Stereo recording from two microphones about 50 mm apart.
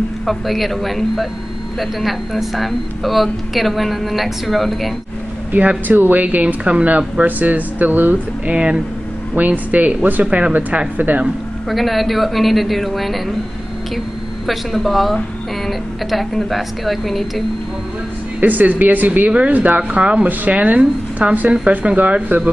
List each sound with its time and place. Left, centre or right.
0.3 s speech: centre
5.5 s speech: right
8.5 s speech: right
10.2 s speech: centre
11.0 s speech: right
11.7 s speech: centre
14.4 s speech: centre
18.4 s speech: right